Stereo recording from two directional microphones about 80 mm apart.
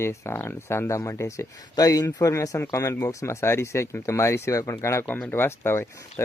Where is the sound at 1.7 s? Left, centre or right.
Left.